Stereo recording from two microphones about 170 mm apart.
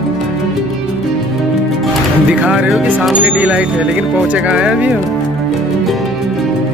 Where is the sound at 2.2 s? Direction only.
5° right (ahead or behind).